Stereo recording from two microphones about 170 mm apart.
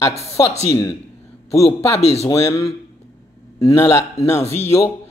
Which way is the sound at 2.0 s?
40° left (ahead or behind).